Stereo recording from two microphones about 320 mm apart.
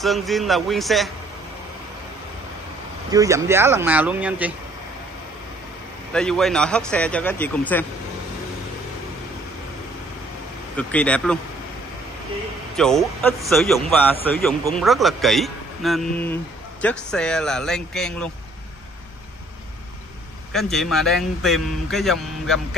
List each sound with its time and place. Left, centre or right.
0.0 s a man's voice: centre
3.1 s speech: centre
6.1 s a man's voice: centre
10.8 s a man's voice: centre
12.7 s a man's voice: centre
20.5 s a man's voice: centre